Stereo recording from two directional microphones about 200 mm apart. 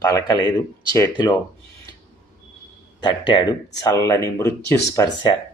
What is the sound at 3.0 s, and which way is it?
Speech, 25° left (ahead or behind).